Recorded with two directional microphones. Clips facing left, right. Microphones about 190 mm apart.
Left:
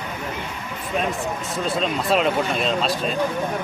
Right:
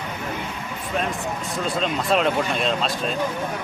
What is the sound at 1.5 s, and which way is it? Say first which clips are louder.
Speech: left 1 dB; centre (ahead or behind).